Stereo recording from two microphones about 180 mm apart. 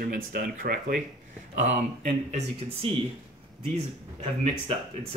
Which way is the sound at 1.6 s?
40° right (ahead or behind).